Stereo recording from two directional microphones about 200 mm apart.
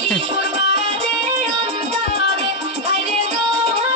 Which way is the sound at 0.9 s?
30° right (ahead or behind).